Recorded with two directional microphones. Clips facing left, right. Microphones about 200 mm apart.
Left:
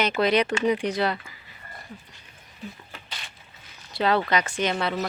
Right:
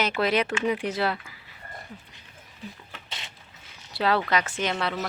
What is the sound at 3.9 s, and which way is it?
Speech, centre (ahead or behind).